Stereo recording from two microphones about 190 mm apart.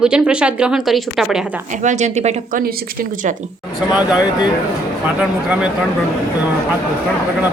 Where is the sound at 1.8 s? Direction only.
40° right (ahead or behind).